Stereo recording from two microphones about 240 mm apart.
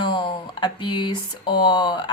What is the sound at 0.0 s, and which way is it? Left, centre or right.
A woman's voice, centre.